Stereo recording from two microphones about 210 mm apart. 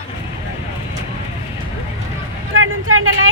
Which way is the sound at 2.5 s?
75° right (ahead or behind).